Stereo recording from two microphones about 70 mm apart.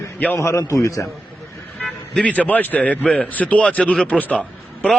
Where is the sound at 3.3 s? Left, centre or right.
Left.